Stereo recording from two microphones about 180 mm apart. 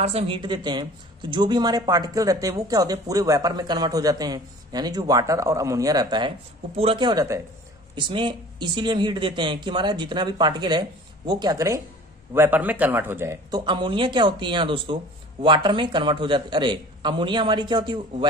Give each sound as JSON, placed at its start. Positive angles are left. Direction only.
{"t": 0.0, "sound": "speech", "side_deg": -35}
{"t": 13.7, "sound": "speech", "side_deg": -25}